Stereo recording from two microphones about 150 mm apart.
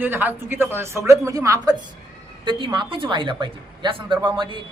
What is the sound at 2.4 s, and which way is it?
A woman's voice, 35° right (ahead or behind).